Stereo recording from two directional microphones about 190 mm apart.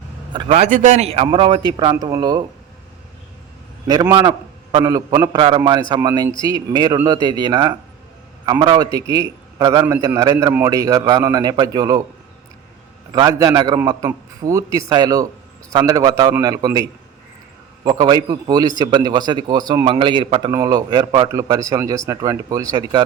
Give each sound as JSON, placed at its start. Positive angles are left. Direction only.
{"t": 0.3, "sound": "a man's voice", "side_deg": -30}
{"t": 4.1, "sound": "a man's voice", "side_deg": -20}
{"t": 13.1, "sound": "a man's voice", "side_deg": -20}
{"t": 17.8, "sound": "a man's voice", "side_deg": -20}